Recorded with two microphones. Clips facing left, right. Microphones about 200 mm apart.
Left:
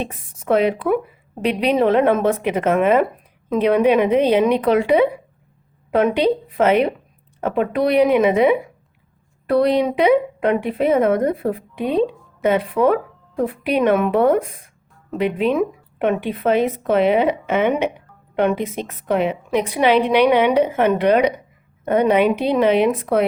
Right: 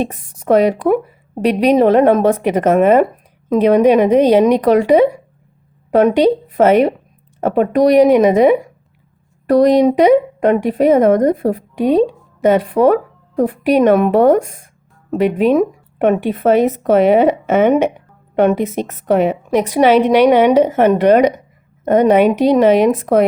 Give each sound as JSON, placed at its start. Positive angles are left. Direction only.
{"t": 0.0, "sound": "a woman's voice", "side_deg": -40}